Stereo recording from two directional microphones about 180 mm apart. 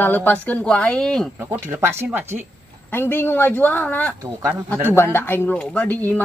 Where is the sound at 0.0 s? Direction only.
10° left (ahead or behind).